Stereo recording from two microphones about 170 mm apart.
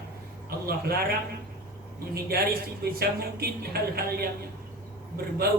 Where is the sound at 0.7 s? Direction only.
65° right (ahead or behind).